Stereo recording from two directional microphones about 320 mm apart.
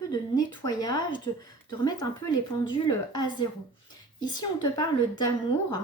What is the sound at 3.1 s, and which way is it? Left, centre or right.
Speech, centre.